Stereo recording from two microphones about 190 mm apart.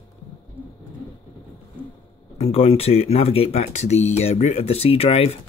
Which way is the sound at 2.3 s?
35° left (ahead or behind).